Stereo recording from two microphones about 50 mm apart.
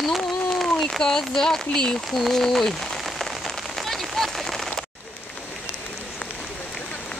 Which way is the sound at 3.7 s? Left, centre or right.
Centre.